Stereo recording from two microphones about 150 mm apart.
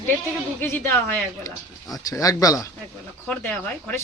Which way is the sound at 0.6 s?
15° left (ahead or behind).